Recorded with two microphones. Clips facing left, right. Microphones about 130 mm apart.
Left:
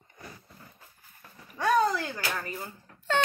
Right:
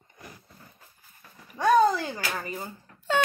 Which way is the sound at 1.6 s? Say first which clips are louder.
Right 4 dB; 20° right (ahead or behind).